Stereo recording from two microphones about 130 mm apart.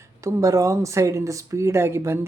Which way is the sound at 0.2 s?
25° right (ahead or behind).